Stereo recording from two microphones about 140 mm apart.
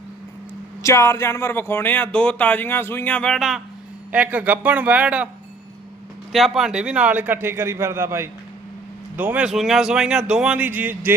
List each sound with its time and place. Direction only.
0.8 s speech: 20° left (ahead or behind); by 5.3 s 10° right (ahead or behind)
6.3 s speech: centre (ahead or behind)